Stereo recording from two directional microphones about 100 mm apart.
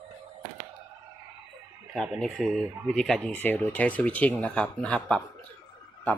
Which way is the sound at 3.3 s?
20° left (ahead or behind).